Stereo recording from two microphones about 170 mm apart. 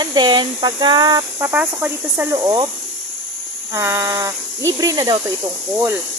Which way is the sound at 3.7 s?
15° right (ahead or behind).